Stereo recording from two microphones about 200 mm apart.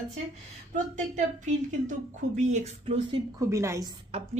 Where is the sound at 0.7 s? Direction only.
35° right (ahead or behind).